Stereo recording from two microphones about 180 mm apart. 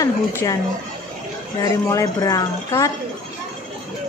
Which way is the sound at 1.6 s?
20° left (ahead or behind).